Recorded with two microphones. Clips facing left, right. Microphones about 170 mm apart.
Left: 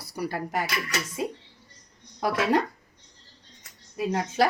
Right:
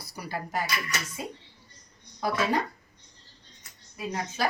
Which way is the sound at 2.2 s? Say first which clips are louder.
Left 3 dB; 75° left (ahead or behind).